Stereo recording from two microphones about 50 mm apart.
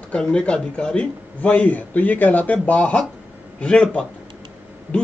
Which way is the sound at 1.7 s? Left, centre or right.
Left.